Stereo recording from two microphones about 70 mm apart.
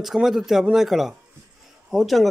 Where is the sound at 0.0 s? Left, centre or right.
Centre.